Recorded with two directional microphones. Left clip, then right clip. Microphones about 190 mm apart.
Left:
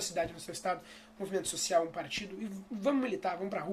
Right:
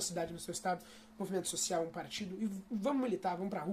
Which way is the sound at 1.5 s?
50° right (ahead or behind).